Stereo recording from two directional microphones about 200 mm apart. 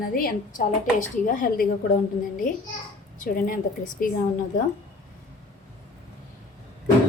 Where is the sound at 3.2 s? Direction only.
45° left (ahead or behind).